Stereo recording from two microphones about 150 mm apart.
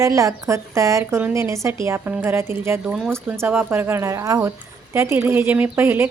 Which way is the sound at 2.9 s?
5° right (ahead or behind).